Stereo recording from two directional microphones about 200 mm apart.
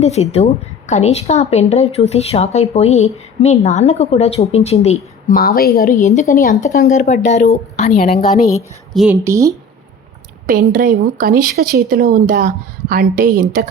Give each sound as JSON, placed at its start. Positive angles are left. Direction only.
{"t": 0.0, "sound": "a woman's voice", "side_deg": 35}
{"t": 5.4, "sound": "a woman's voice", "side_deg": 50}
{"t": 8.9, "sound": "a woman's voice", "side_deg": 0}
{"t": 9.1, "sound": "speech", "side_deg": -15}
{"t": 10.4, "sound": "speech", "side_deg": -45}